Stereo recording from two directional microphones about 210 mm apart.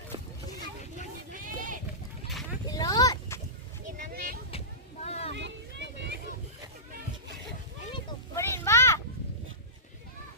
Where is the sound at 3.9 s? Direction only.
45° right (ahead or behind).